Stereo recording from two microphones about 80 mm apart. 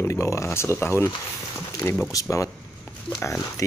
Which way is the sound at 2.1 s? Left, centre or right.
Left.